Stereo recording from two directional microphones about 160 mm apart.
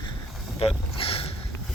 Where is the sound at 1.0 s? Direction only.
35° left (ahead or behind).